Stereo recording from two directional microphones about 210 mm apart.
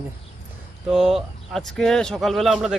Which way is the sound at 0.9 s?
Centre (ahead or behind).